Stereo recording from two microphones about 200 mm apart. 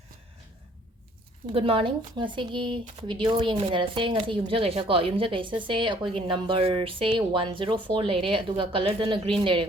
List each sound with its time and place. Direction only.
1.5 s speech: 25° right (ahead or behind)